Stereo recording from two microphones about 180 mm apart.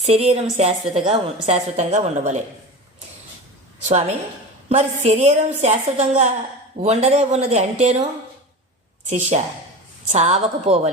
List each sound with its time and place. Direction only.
0.0 s a woman's voice: 35° right (ahead or behind)
4.7 s a woman's voice: 40° right (ahead or behind)
9.0 s a woman's voice: 40° right (ahead or behind)